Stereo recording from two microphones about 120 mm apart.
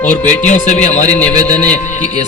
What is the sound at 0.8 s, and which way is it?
Speech, 85° left.